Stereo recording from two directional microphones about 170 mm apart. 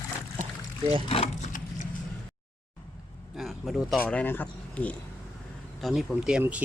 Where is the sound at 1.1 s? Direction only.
35° left (ahead or behind).